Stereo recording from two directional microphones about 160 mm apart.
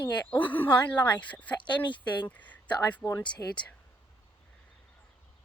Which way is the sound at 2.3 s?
10° left (ahead or behind).